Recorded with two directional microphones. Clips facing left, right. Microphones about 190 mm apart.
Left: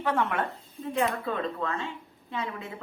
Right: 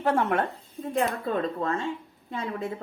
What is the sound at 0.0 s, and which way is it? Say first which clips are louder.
A woman's voice: right 3 dB; 45° right (ahead or behind).